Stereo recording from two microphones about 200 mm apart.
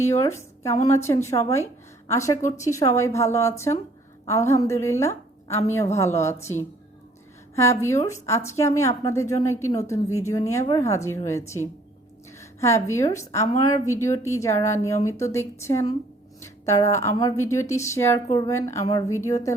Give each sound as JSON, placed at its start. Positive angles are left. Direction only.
{"t": 0.0, "sound": "a woman's voice", "side_deg": 15}